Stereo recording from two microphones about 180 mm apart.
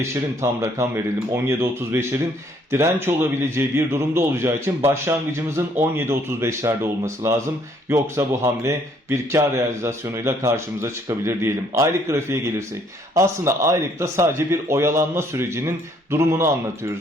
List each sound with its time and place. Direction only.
0.4 s a man's voice: 15° right (ahead or behind)